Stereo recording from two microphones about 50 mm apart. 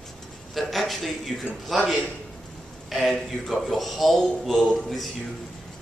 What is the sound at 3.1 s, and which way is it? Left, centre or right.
A man's voice, centre.